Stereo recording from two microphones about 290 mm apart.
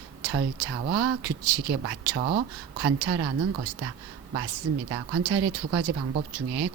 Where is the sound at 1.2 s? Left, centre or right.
Right.